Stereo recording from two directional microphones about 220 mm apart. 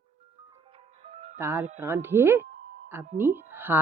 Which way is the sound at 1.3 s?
10° right (ahead or behind).